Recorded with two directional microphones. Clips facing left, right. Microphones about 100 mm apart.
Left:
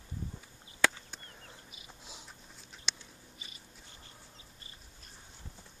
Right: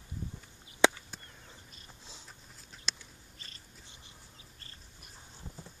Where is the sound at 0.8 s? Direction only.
20° right (ahead or behind).